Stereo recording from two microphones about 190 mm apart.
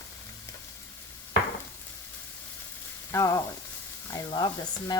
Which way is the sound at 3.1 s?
15° left (ahead or behind).